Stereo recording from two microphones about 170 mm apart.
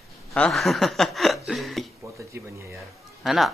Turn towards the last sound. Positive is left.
turn(degrees=0)  # may be behind; listen again after turning